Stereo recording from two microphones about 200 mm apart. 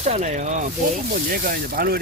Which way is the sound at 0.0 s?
35° right (ahead or behind).